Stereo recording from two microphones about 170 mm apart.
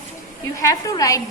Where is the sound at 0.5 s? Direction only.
20° left (ahead or behind).